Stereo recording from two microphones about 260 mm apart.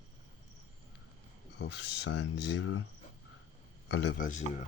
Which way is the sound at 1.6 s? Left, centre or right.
Left.